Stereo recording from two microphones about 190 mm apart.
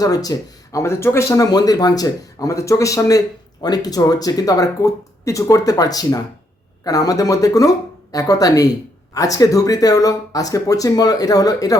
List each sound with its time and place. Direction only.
0.0 s speech: 20° left (ahead or behind)